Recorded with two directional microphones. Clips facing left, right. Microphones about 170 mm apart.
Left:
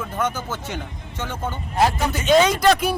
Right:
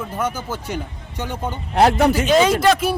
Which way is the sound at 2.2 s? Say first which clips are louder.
Left 3 dB; 5° right (ahead or behind).